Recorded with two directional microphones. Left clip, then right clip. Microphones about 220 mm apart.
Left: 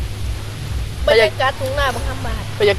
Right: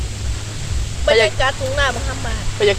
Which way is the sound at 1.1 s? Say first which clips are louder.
Left 1 dB; 5° right (ahead or behind).